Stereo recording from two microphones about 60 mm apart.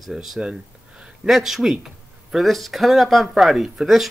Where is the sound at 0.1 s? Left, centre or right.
Centre.